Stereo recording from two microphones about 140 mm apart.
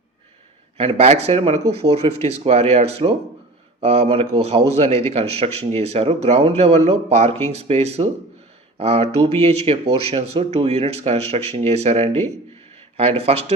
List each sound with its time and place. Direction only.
0.8 s speech: 45° right (ahead or behind)